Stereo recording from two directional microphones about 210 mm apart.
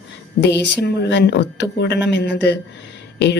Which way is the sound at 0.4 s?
55° left (ahead or behind).